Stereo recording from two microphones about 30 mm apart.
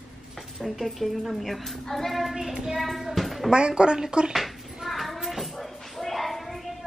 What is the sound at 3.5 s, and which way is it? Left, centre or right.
Speech, right.